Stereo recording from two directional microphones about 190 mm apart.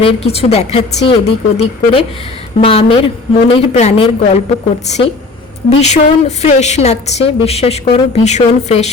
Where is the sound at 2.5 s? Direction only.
30° left (ahead or behind).